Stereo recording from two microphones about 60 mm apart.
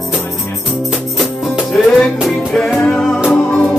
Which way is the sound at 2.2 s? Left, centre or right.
Centre.